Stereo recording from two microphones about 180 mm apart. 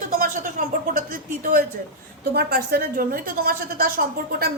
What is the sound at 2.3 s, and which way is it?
A woman's voice, 60° right (ahead or behind).